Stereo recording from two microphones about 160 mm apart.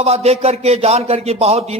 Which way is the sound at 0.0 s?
40° right (ahead or behind).